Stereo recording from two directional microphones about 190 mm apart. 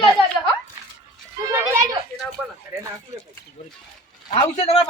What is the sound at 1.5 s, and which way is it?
Speech, 15° right (ahead or behind).